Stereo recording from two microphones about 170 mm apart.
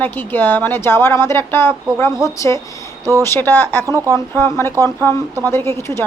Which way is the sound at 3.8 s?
20° right (ahead or behind).